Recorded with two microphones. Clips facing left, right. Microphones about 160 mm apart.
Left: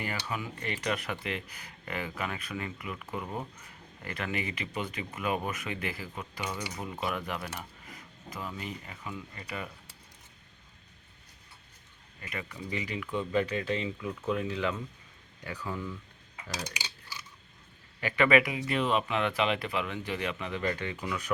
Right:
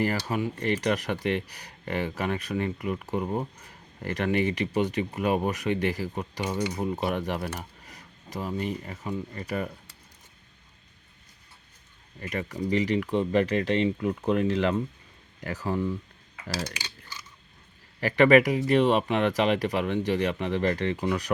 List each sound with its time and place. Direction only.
0.0 s speech: 40° right (ahead or behind)
12.2 s speech: 40° right (ahead or behind)
13.6 s speech: 70° right (ahead or behind)
14.0 s speech: 50° right (ahead or behind)
14.5 s speech: 70° right (ahead or behind)
15.4 s speech: 45° right (ahead or behind)
18.0 s speech: 40° right (ahead or behind)